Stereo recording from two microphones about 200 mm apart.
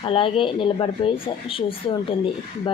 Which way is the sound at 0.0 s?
25° left (ahead or behind).